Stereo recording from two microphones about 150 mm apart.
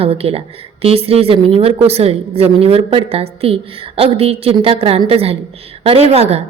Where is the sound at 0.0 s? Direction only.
40° right (ahead or behind).